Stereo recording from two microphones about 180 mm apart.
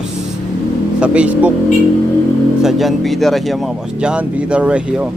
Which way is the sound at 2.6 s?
Centre (ahead or behind).